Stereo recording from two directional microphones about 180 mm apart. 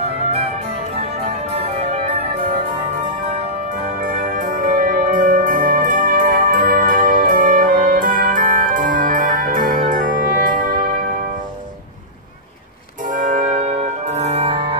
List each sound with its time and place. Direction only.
4.0 s music: 50° right (ahead or behind)
13.0 s music: 45° right (ahead or behind)